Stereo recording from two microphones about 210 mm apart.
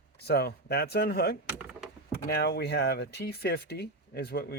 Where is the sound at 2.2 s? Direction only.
50° left (ahead or behind).